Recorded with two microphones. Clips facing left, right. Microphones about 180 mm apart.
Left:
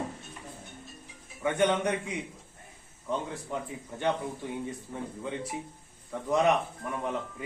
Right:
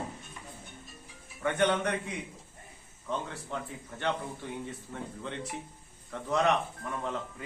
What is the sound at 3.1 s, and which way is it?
Speech, 15° left (ahead or behind).